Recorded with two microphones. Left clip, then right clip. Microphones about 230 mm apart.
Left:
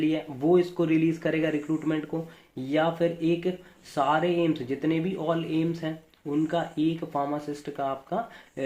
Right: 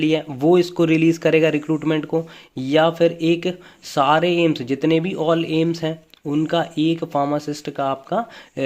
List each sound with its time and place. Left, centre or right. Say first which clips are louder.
0.0 s speech: right 8 dB; right